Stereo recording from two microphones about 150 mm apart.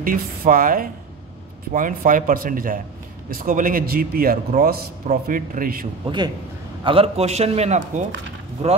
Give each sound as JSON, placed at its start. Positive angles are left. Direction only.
{"t": 0.0, "sound": "a man's voice", "side_deg": -65}
{"t": 5.2, "sound": "speech", "side_deg": -65}
{"t": 6.0, "sound": "a man's voice", "side_deg": -30}